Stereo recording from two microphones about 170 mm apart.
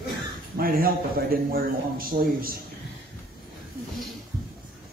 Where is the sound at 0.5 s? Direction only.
60° right (ahead or behind).